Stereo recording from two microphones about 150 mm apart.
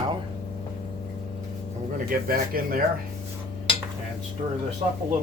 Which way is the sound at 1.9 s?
75° right (ahead or behind).